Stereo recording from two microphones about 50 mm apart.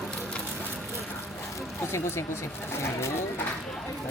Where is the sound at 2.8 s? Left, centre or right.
Left.